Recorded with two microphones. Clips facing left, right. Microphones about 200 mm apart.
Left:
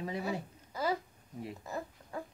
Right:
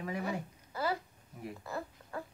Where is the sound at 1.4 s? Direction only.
25° left (ahead or behind).